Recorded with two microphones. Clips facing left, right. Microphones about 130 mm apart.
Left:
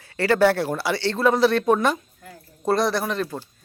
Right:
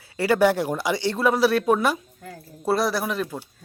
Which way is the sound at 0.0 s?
10° right (ahead or behind).